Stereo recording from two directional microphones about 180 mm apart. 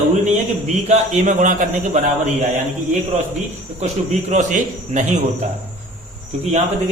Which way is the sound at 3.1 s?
40° right (ahead or behind).